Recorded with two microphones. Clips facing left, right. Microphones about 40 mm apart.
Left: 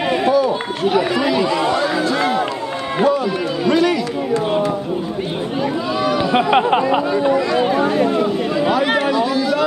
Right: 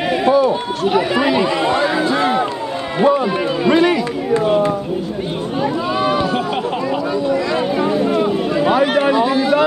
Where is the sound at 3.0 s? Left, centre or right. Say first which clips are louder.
Right 3 dB; right.